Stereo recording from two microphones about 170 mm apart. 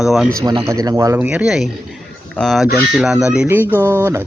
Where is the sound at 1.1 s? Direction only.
5° right (ahead or behind).